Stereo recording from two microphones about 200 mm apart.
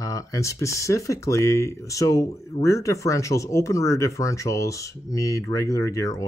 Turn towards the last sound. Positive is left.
turn(degrees=15)  # may be behind; listen again after turning